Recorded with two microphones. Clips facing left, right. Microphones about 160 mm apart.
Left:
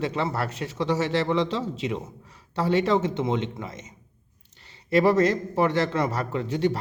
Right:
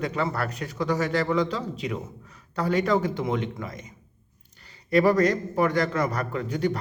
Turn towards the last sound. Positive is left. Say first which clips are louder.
# left 2 dB
turn(degrees=25)  # may be behind; listen again after turning